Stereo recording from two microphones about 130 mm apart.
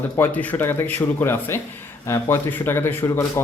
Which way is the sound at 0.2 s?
15° left (ahead or behind).